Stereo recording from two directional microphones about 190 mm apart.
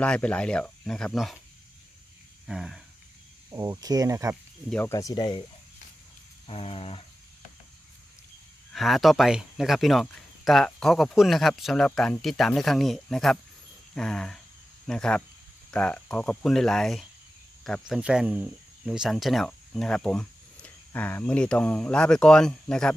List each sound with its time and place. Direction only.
0.0 s speech: 5° left (ahead or behind)
2.4 s a sound: 5° right (ahead or behind)
3.4 s speech: 15° right (ahead or behind)
4.6 s speech: 10° left (ahead or behind)
4.9 s wild animals: 20° left (ahead or behind)
8.7 s speech: centre (ahead or behind)